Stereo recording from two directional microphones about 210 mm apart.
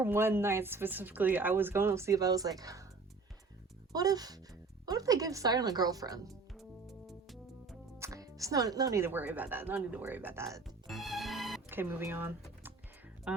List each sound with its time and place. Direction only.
0.0 s speech: 10° right (ahead or behind)
3.9 s speech: 20° right (ahead or behind)
6.2 s music: centre (ahead or behind)
7.9 s speech: 15° right (ahead or behind)
10.8 s music: centre (ahead or behind)
13.3 s speech: 5° right (ahead or behind)